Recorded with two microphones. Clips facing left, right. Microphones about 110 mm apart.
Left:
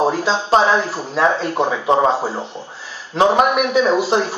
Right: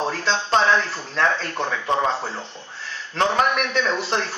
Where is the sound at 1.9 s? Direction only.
30° left (ahead or behind).